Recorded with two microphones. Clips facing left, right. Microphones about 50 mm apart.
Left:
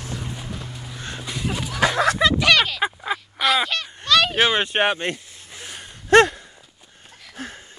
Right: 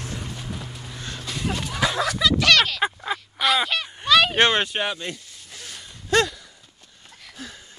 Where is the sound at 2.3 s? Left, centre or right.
Centre.